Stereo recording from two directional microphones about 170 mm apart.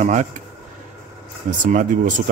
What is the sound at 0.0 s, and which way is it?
Speech, 45° right (ahead or behind).